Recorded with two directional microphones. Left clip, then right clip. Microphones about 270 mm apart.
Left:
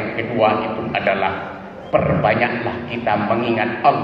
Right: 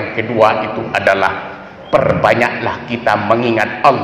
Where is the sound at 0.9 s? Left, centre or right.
Right.